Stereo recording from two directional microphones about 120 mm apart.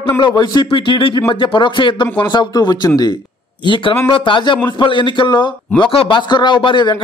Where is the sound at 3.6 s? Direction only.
45° left (ahead or behind).